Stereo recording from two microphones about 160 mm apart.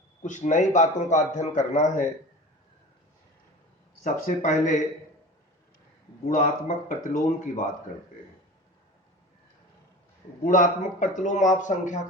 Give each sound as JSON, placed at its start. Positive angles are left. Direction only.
{"t": 0.2, "sound": "a man's voice", "side_deg": 50}
{"t": 4.0, "sound": "a man's voice", "side_deg": 50}
{"t": 6.2, "sound": "speech", "side_deg": 55}
{"t": 10.4, "sound": "a man's voice", "side_deg": 55}